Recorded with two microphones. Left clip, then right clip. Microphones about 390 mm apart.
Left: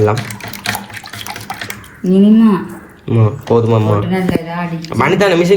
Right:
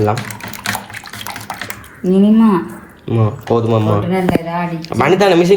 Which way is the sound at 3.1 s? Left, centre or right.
Centre.